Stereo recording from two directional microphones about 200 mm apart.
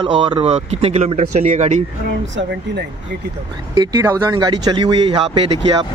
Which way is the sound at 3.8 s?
15° right (ahead or behind).